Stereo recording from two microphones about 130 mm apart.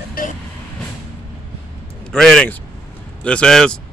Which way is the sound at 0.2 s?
90° left.